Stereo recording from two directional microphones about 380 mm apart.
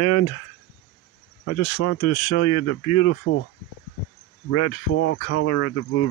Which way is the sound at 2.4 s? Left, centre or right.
Left.